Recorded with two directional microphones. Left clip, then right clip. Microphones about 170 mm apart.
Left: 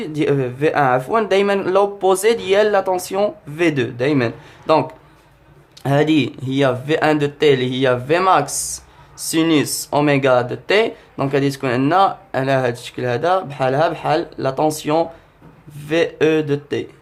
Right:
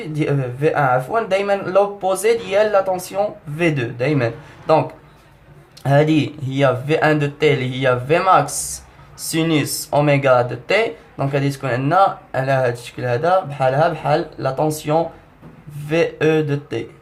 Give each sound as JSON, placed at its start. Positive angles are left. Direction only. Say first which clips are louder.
{"t": 0.0, "sound": "speech", "louder": "left 3 dB", "side_deg": 35}
{"t": 5.8, "sound": "speech", "louder": "even", "side_deg": 25}